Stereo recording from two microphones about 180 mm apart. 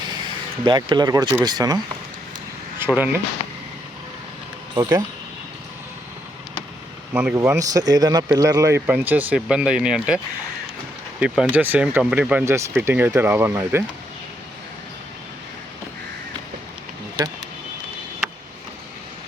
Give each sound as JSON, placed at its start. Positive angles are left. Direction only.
{"t": 0.6, "sound": "speech", "side_deg": -25}
{"t": 2.7, "sound": "speech", "side_deg": -10}
{"t": 4.7, "sound": "speech", "side_deg": -15}
{"t": 7.1, "sound": "speech", "side_deg": -10}
{"t": 11.2, "sound": "speech", "side_deg": -5}